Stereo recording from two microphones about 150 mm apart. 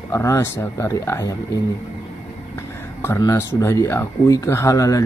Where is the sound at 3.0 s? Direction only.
20° left (ahead or behind).